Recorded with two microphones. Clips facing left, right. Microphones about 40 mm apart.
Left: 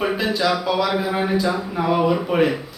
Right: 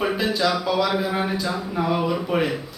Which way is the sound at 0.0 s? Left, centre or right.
Centre.